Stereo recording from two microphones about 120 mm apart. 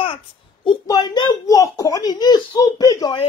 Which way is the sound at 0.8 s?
35° left (ahead or behind).